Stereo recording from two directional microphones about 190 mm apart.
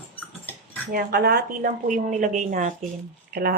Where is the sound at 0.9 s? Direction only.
50° right (ahead or behind).